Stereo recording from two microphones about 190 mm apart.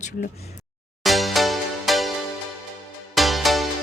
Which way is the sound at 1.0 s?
Centre (ahead or behind).